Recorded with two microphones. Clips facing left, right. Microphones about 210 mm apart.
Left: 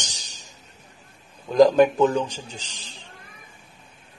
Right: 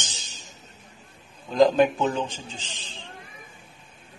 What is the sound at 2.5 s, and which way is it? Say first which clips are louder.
Speech: even; 40° left (ahead or behind).